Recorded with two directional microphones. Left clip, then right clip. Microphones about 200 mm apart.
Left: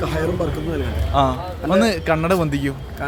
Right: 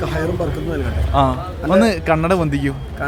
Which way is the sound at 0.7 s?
Centre (ahead or behind).